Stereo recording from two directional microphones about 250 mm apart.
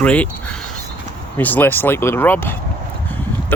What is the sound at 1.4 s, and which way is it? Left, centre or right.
Speech, centre.